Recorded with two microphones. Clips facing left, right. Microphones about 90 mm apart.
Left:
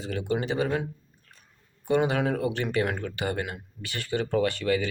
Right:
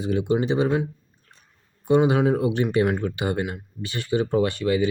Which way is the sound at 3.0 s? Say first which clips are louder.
Right 5 dB; 20° right (ahead or behind).